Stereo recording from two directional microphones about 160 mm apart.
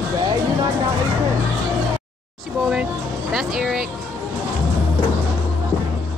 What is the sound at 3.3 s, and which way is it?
Music, centre (ahead or behind).